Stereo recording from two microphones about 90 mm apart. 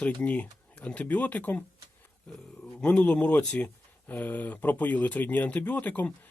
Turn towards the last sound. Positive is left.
turn(degrees=15)  # may be behind; listen again after turning